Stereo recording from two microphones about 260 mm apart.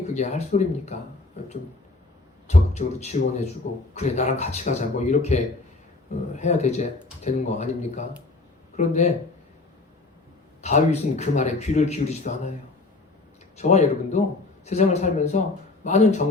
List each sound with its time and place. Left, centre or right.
0.1 s speech: left
2.5 s speech: left
10.6 s speech: left
13.6 s speech: left